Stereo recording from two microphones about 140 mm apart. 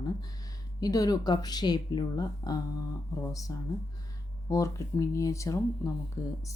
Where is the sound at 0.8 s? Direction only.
25° left (ahead or behind).